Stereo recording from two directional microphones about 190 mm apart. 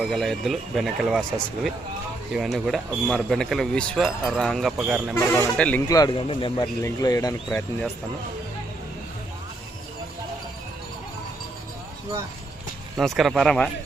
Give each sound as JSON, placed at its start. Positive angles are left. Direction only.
{"t": 0.0, "sound": "speech", "side_deg": 0}
{"t": 2.3, "sound": "speech", "side_deg": 0}
{"t": 5.1, "sound": "speech", "side_deg": 10}
{"t": 5.9, "sound": "speech", "side_deg": 25}
{"t": 13.0, "sound": "speech", "side_deg": 0}